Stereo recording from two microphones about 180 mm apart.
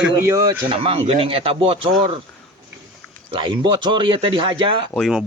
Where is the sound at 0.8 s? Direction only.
30° right (ahead or behind).